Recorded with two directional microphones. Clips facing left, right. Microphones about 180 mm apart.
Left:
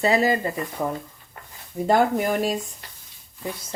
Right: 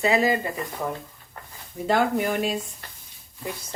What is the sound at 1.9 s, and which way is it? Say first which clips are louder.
Speech: left 2 dB; 40° left (ahead or behind).